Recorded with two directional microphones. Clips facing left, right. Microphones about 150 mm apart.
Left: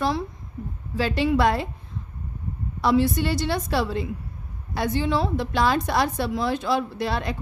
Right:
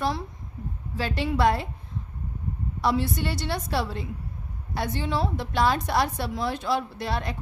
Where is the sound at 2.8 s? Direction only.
90° left.